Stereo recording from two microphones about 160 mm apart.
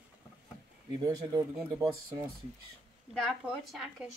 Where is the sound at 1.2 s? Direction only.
25° right (ahead or behind).